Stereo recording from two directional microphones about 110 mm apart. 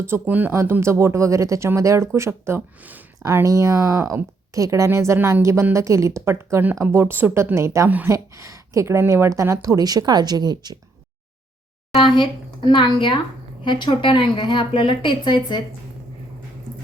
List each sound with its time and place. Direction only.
0.0 s speech: 20° right (ahead or behind)
7.9 s speech: 15° right (ahead or behind)
8.1 s speech: 30° right (ahead or behind)
11.9 s a woman's voice: 50° left (ahead or behind)